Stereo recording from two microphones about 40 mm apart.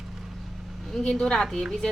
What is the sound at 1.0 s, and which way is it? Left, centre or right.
Speech, centre.